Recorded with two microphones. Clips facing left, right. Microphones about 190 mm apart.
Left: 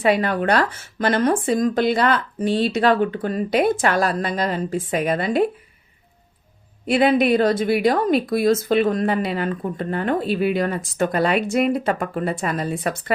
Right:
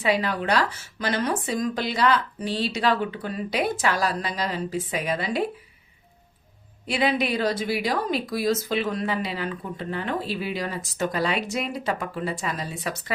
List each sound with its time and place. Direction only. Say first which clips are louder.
0.0 s speech: left 5 dB; 55° left (ahead or behind)
6.8 s speech: left 7 dB; 50° left (ahead or behind)